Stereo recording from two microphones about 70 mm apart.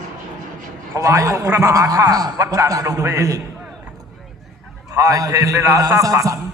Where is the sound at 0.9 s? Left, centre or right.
Right.